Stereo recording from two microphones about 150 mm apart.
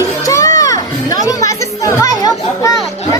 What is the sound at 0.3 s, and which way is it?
Music, 20° left (ahead or behind).